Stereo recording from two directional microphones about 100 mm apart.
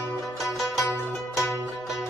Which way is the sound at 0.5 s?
Centre (ahead or behind).